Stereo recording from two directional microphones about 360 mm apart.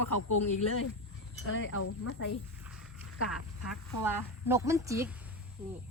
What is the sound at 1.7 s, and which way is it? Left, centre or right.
Speech, left.